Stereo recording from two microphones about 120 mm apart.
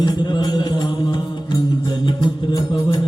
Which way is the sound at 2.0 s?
40° left (ahead or behind).